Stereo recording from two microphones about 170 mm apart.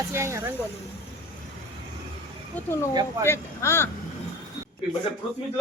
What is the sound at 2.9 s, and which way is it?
Speech, 25° right (ahead or behind).